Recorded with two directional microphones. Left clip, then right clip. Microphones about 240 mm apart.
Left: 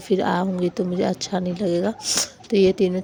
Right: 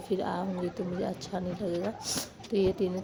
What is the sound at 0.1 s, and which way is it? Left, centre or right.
Speech, left.